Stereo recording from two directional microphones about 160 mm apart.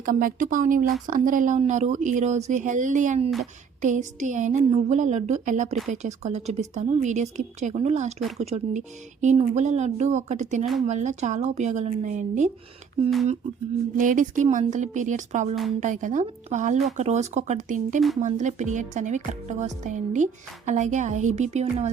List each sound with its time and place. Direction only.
0.0 s speech: 60° right (ahead or behind)
13.9 s speech: 55° right (ahead or behind)